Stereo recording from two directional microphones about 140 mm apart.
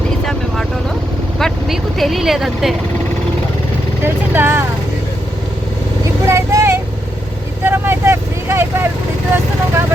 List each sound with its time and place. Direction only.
1.4 s vehicle: centre (ahead or behind)
4.0 s speech: 15° right (ahead or behind)
6.2 s vehicle: 20° right (ahead or behind)